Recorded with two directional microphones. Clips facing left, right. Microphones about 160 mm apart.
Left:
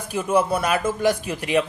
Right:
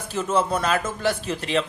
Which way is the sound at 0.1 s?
10° left (ahead or behind).